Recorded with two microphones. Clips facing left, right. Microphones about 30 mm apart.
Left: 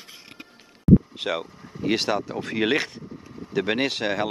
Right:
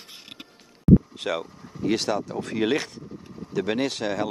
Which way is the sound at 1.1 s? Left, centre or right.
Centre.